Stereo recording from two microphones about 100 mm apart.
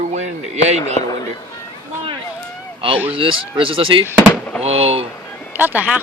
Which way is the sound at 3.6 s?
65° right (ahead or behind).